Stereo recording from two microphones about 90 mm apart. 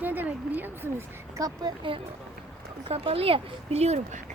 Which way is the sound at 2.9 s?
90° right.